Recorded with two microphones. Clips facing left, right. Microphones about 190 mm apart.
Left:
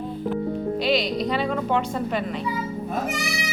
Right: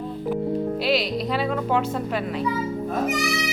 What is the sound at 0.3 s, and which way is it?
Speech, 5° right (ahead or behind).